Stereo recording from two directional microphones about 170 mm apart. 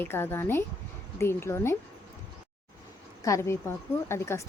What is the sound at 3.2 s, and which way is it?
A woman's voice, 15° left (ahead or behind).